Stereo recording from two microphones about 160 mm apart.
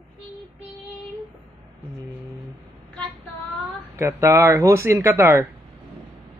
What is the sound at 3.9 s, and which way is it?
Speech, 15° right (ahead or behind).